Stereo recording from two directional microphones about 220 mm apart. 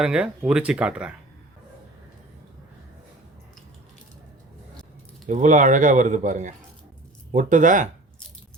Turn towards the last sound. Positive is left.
turn(degrees=-35)  # may be behind; listen again after turning